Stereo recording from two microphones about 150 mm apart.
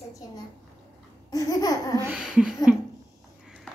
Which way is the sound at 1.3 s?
25° left (ahead or behind).